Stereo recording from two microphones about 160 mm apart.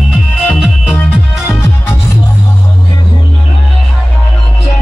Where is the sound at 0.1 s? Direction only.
Centre (ahead or behind).